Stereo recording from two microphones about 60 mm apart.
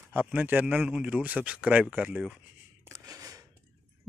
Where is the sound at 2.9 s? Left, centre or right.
Right.